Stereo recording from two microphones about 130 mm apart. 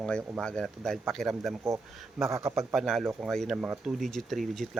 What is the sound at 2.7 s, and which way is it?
Speech, centre (ahead or behind).